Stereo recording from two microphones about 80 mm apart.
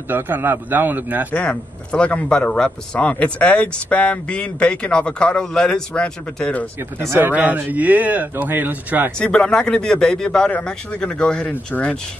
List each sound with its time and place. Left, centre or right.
0.1 s speech: right
1.3 s speech: centre
7.0 s speech: right
7.2 s speech: right
9.2 s speech: centre
11.5 s speech: left